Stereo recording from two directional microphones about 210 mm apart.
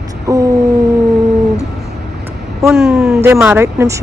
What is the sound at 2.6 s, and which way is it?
Speech, centre (ahead or behind).